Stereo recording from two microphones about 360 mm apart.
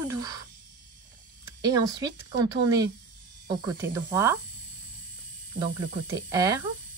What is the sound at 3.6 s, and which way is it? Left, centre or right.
Speech, centre.